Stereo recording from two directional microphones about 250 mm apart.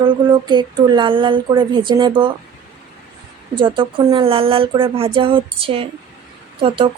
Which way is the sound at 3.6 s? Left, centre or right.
Centre.